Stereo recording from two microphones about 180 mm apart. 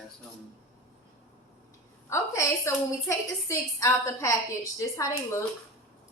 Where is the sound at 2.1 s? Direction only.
15° left (ahead or behind).